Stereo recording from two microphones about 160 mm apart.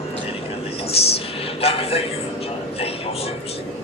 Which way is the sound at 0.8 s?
35° left (ahead or behind).